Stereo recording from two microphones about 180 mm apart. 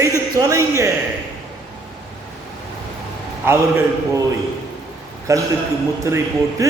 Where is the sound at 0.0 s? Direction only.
20° right (ahead or behind).